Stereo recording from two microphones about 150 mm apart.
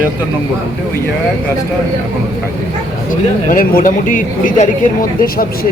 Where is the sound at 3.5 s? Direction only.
65° left (ahead or behind).